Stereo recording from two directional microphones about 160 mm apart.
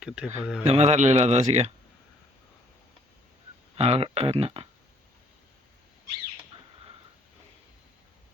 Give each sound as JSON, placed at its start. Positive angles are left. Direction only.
{"t": 0.0, "sound": "speech", "side_deg": -5}
{"t": 0.6, "sound": "speech", "side_deg": -45}
{"t": 3.8, "sound": "speech", "side_deg": -40}